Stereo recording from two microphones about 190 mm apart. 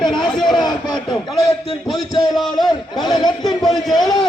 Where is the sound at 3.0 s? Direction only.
20° left (ahead or behind).